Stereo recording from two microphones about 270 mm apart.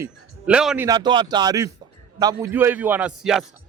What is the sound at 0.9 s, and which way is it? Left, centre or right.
A man's voice, centre.